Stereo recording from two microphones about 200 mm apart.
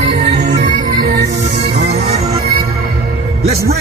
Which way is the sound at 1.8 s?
30° right (ahead or behind).